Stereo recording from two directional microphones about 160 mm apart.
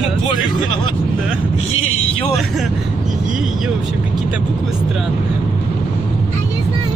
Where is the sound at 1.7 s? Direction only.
40° left (ahead or behind).